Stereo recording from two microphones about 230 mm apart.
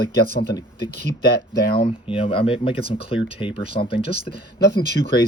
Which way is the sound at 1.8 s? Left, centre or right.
Left.